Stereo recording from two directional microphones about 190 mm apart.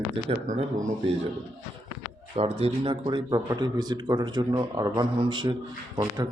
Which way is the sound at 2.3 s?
30° right (ahead or behind).